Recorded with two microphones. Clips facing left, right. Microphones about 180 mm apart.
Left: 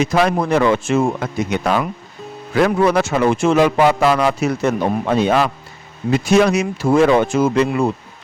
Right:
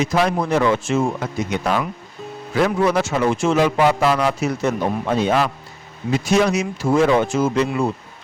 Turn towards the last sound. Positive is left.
turn(degrees=60)  # may be behind; listen again after turning